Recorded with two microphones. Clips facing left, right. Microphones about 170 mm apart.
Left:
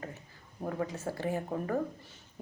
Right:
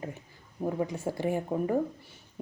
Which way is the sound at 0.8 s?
15° right (ahead or behind).